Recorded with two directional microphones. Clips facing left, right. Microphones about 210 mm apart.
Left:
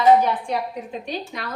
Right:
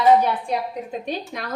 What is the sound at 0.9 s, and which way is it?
Speech, 45° right (ahead or behind).